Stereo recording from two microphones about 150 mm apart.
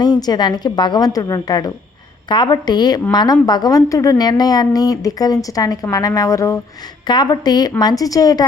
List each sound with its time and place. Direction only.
0.0 s a woman's voice: 30° left (ahead or behind)